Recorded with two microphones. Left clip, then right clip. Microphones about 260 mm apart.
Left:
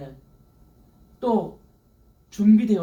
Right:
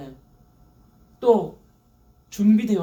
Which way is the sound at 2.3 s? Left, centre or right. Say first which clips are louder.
Left 1 dB; right.